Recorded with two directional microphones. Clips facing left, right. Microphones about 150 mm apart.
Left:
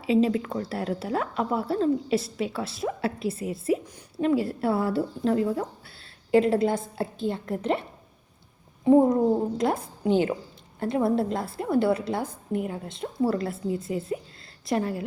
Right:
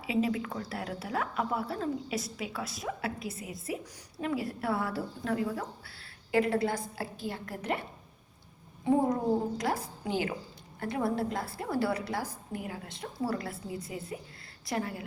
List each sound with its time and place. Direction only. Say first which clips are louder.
0.0 s a woman's voice: left 7 dB; 25° left (ahead or behind)
9.6 s a woman's voice: left 6 dB; 25° left (ahead or behind)